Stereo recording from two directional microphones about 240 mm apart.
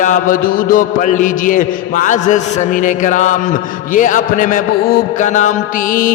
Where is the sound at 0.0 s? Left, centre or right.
Left.